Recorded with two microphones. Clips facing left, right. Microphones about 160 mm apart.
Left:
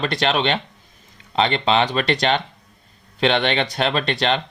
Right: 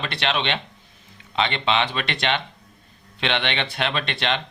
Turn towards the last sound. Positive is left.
turn(degrees=40)  # may be behind; listen again after turning